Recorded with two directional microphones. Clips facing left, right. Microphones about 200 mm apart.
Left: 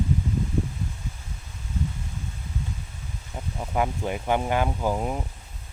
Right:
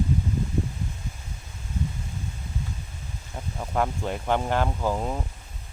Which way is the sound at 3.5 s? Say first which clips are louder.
Even; 5° left (ahead or behind).